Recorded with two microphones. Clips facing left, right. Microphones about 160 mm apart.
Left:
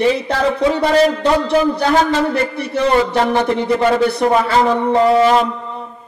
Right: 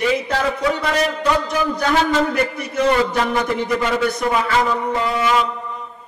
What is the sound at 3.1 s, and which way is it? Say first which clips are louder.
A man's voice: left 4 dB; 35° left (ahead or behind).